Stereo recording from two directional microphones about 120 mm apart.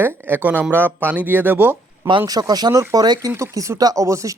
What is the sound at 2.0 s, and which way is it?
Speech, 35° right (ahead or behind).